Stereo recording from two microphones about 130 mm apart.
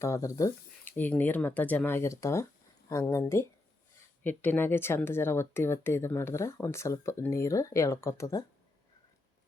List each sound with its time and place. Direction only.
0.0 s speech: 25° left (ahead or behind)
0.9 s speech: 15° left (ahead or behind)